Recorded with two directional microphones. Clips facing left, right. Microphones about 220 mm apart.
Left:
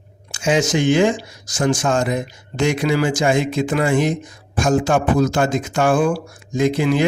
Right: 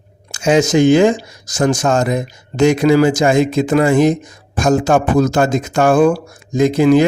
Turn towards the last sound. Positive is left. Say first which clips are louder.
# right 6 dB
turn(degrees=-40)  # may be behind; listen again after turning